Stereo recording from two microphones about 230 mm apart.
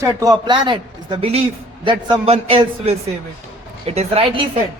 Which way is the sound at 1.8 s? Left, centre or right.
Centre.